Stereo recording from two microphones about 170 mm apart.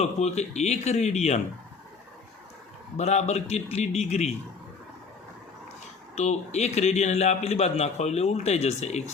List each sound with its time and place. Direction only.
0.0 s a man's voice: 40° left (ahead or behind)
3.0 s a man's voice: 40° left (ahead or behind)
6.1 s a man's voice: 40° left (ahead or behind)